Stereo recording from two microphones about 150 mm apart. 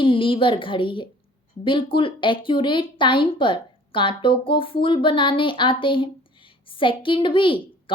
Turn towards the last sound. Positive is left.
turn(degrees=35)  # may be behind; listen again after turning